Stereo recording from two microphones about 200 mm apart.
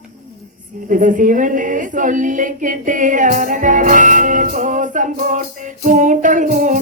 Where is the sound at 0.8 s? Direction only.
40° right (ahead or behind).